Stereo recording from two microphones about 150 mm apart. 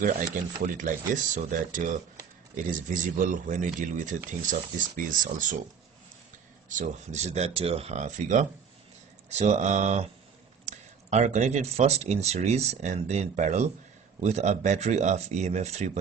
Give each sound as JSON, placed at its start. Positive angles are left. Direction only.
{"t": 0.0, "sound": "speech", "side_deg": -65}
{"t": 6.7, "sound": "speech", "side_deg": -55}